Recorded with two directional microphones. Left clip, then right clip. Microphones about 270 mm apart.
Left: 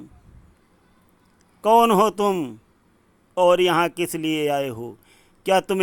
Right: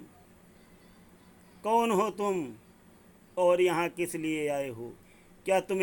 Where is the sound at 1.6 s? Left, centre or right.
Centre.